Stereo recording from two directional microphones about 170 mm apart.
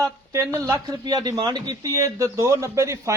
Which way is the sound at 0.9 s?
25° right (ahead or behind).